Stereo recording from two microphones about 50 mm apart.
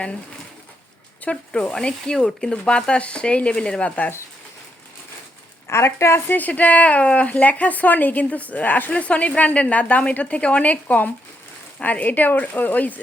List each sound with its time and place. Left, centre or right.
1.2 s speech: left
5.6 s a woman's voice: left
6.2 s speech: left